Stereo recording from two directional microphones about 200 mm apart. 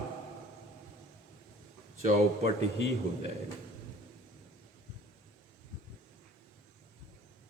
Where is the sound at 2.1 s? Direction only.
30° right (ahead or behind).